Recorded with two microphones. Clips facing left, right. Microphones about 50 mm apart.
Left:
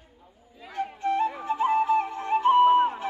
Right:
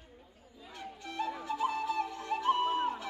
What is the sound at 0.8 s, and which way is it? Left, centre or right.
Flute, left.